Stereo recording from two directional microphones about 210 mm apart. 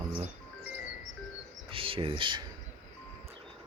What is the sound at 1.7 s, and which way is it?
Speech, 25° right (ahead or behind).